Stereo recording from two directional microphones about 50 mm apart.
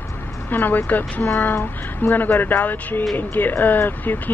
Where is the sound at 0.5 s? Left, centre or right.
Left.